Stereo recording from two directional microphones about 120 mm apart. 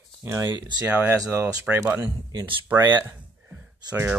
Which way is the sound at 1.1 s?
25° right (ahead or behind).